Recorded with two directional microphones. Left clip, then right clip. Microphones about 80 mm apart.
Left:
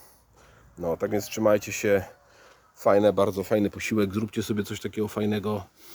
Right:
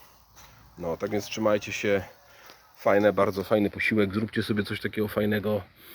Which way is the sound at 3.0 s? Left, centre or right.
Left.